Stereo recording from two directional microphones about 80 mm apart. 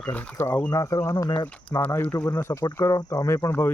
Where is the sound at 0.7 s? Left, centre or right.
Left.